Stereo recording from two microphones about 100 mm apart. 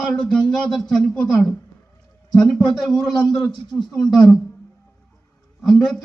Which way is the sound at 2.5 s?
Centre (ahead or behind).